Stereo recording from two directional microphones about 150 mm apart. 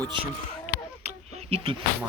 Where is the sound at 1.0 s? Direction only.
40° right (ahead or behind).